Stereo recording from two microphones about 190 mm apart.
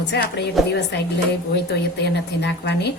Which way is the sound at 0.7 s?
60° left (ahead or behind).